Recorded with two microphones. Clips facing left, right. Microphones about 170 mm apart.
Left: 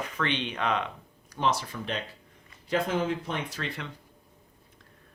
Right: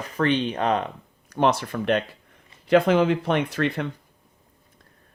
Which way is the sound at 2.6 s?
75° right (ahead or behind).